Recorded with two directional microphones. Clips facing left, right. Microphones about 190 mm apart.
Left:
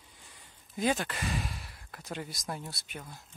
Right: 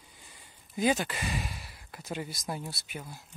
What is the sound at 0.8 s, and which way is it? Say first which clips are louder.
Speech: right 2 dB; 5° right (ahead or behind).